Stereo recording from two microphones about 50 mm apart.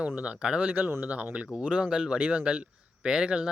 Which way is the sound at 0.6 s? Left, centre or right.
Right.